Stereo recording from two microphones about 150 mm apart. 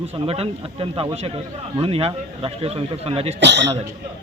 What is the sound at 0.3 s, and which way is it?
A man's voice, 40° right (ahead or behind).